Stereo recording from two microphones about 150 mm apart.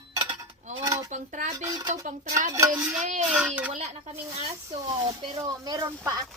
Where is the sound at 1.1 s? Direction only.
55° right (ahead or behind).